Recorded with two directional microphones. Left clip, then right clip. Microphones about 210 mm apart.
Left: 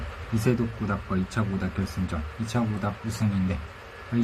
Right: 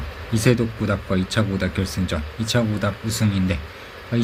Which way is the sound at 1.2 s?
15° right (ahead or behind).